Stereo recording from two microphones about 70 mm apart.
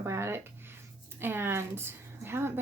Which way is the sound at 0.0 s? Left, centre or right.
Right.